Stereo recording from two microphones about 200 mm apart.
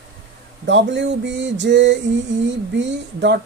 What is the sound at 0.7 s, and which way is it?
Speech, 65° right (ahead or behind).